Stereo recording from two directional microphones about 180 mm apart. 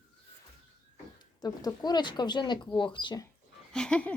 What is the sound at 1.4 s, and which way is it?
Speech, 20° left (ahead or behind).